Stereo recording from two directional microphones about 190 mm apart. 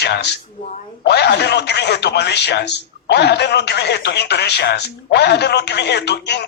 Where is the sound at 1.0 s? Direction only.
60° left (ahead or behind).